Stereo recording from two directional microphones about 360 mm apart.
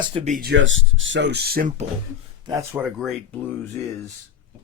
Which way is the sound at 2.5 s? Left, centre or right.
Centre.